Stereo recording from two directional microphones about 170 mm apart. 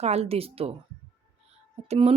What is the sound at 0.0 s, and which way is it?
Speech, 40° right (ahead or behind).